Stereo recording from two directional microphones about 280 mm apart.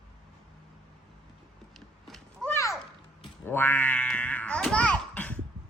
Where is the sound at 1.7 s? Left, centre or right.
Centre.